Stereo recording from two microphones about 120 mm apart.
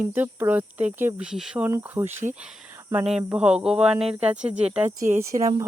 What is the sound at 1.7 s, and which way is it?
Speech, 20° right (ahead or behind).